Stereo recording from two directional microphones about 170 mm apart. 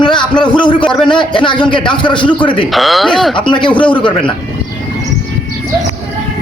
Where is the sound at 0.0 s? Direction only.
25° left (ahead or behind).